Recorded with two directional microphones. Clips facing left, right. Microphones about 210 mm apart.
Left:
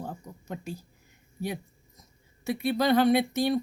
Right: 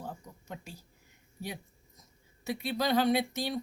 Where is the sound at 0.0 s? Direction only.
45° left (ahead or behind).